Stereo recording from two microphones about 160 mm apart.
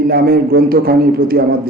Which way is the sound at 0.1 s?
70° right (ahead or behind).